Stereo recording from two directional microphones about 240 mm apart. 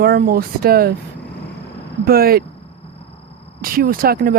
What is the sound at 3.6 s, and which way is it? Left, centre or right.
Speech, right.